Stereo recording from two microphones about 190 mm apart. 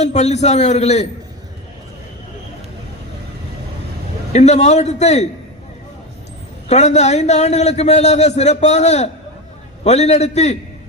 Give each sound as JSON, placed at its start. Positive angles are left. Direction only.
{"t": 0.0, "sound": "a man's voice", "side_deg": 35}
{"t": 4.3, "sound": "a man's voice", "side_deg": 35}
{"t": 6.7, "sound": "a man's voice", "side_deg": 35}